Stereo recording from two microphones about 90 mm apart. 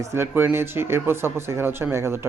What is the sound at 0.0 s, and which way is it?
Speech, 30° right (ahead or behind).